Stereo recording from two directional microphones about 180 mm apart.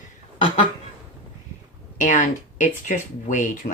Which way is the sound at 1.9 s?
45° left (ahead or behind).